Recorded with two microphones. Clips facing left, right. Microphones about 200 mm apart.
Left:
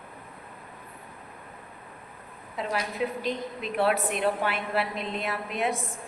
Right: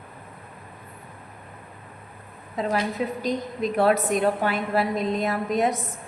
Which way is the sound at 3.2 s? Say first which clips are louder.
Right 5 dB; 40° right (ahead or behind).